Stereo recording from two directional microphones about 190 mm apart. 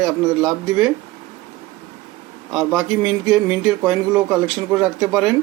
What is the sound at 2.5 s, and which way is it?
Speech, centre (ahead or behind).